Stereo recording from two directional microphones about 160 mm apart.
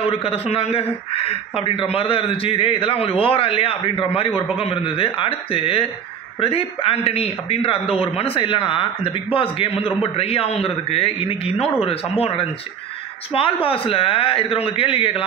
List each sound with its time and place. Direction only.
0.0 s a man's voice: 35° left (ahead or behind)